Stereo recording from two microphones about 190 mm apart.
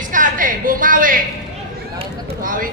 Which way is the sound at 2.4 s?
45° right (ahead or behind).